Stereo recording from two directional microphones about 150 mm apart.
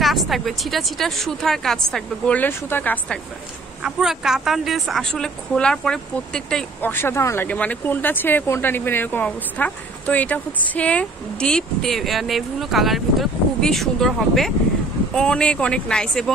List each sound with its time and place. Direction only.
0.0 s speech: centre (ahead or behind)
3.8 s speech: 5° right (ahead or behind)